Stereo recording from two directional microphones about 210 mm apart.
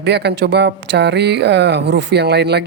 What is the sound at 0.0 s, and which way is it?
Speech, 55° right (ahead or behind).